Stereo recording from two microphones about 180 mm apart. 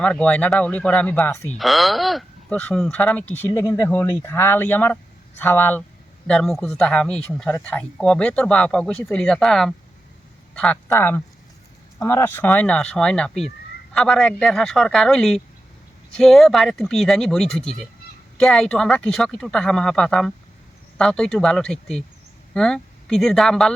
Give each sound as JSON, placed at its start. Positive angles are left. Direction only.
{"t": 0.0, "sound": "speech", "side_deg": 5}
{"t": 1.5, "sound": "a man's voice", "side_deg": 0}